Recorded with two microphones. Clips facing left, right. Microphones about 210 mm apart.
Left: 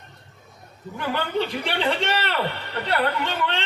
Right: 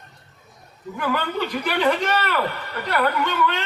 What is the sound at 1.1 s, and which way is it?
A man's voice, 30° left (ahead or behind).